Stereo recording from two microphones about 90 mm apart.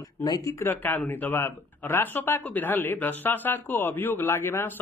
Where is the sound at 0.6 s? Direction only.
20° left (ahead or behind).